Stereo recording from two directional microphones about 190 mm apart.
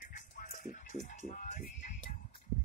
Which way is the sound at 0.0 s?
40° left (ahead or behind).